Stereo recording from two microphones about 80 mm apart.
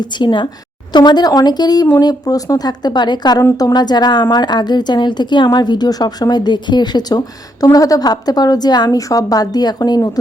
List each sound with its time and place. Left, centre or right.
0.0 s a woman's voice: left
0.9 s a woman's voice: left